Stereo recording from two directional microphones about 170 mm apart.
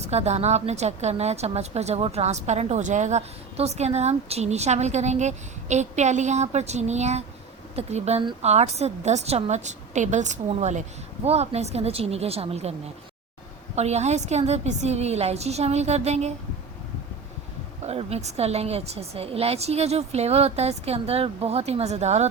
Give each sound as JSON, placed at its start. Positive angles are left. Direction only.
{"t": 0.0, "sound": "a woman's voice", "side_deg": -40}
{"t": 8.2, "sound": "a woman's voice", "side_deg": -25}
{"t": 8.4, "sound": "a woman's voice", "side_deg": -40}
{"t": 13.7, "sound": "a woman's voice", "side_deg": -40}
{"t": 17.8, "sound": "a woman's voice", "side_deg": -35}